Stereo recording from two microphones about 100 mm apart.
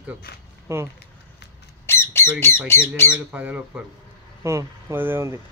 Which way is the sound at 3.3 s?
15° right (ahead or behind).